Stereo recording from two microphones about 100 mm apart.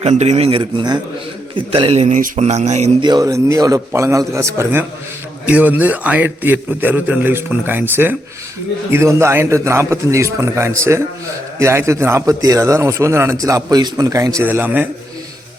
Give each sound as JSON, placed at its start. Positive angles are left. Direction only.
{"t": 0.0, "sound": "speech", "side_deg": -90}
{"t": 0.6, "sound": "a man's voice", "side_deg": -45}
{"t": 1.5, "sound": "speech", "side_deg": -70}
{"t": 3.0, "sound": "a man's voice", "side_deg": -40}
{"t": 14.4, "sound": "a man's voice", "side_deg": -20}